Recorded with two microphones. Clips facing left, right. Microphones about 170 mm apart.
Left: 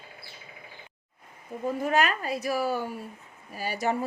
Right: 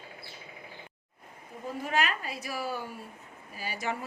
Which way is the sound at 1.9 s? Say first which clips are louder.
Left 4 dB; 45° left (ahead or behind).